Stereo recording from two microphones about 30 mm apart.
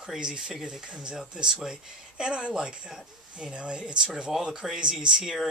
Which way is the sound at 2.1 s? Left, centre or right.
Right.